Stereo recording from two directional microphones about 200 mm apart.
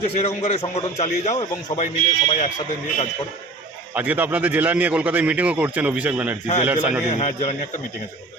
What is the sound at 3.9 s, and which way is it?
A man's voice, 10° right (ahead or behind).